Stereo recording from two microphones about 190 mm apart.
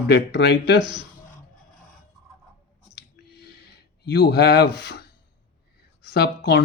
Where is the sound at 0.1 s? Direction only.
60° left (ahead or behind).